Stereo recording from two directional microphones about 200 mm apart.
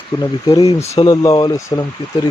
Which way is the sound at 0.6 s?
25° left (ahead or behind).